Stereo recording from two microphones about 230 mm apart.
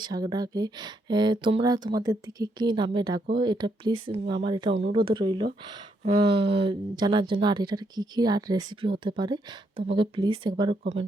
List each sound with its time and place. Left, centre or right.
0.0 s speech: centre